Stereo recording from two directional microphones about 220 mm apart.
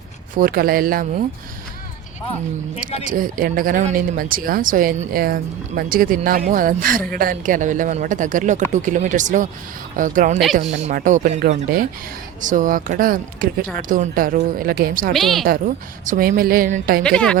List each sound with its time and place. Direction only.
0.3 s speech: 40° right (ahead or behind)
3.1 s speech: 40° right (ahead or behind)
15.1 s a woman's voice: centre (ahead or behind)
15.4 s speech: 40° right (ahead or behind)
17.0 s a woman's voice: 5° left (ahead or behind)